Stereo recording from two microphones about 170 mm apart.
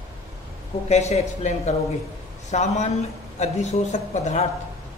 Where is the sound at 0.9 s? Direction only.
40° left (ahead or behind).